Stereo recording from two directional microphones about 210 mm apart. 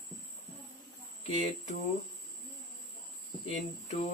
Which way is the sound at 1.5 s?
30° left (ahead or behind).